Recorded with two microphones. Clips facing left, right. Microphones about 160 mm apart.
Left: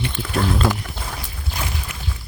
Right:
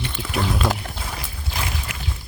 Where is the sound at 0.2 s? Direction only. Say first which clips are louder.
Left 2 dB; 5° right (ahead or behind).